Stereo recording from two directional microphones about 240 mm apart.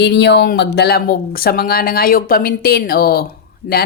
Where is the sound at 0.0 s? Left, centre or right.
Left.